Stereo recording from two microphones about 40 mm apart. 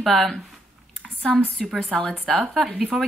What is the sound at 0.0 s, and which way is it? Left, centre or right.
Speech, centre.